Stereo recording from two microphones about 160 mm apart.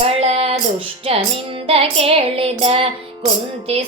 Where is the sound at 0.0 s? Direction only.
40° right (ahead or behind).